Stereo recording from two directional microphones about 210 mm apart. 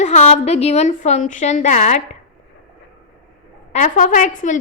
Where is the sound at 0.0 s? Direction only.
35° left (ahead or behind).